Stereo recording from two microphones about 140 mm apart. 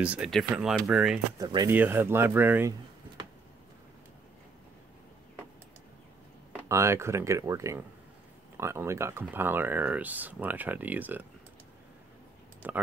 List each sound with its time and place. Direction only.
0.0 s speech: 10° right (ahead or behind)
1.4 s speech: 30° right (ahead or behind)
1.7 s speech: 15° right (ahead or behind)
6.7 s speech: 20° right (ahead or behind)
12.6 s speech: 15° right (ahead or behind)